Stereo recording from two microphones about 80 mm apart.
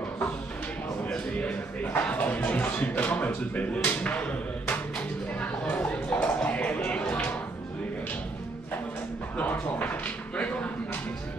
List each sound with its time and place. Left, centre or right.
1.0 s speech: centre
9.4 s speech: left